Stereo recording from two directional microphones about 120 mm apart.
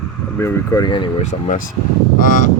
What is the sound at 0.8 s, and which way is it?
Speech, 40° left (ahead or behind).